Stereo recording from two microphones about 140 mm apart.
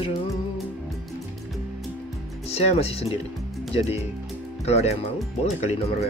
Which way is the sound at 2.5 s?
50° left (ahead or behind).